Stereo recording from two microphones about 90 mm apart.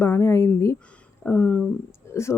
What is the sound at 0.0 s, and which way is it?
A woman's voice, 30° left (ahead or behind).